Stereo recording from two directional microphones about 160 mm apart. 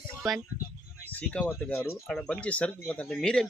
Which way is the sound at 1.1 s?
10° left (ahead or behind).